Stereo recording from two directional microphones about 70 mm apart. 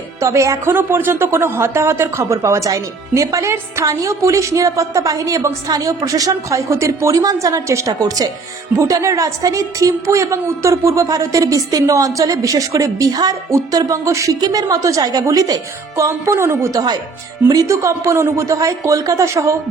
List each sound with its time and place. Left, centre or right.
0.2 s speech: right
0.7 s speech: right
8.0 s speech: right
8.8 s speech: right
14.4 s speech: right
17.5 s speech: right